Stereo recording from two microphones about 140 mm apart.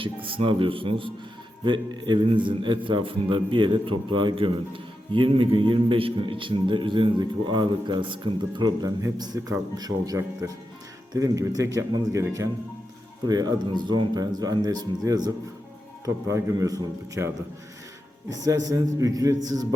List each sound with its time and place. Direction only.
0.0 s a man's voice: 40° right (ahead or behind)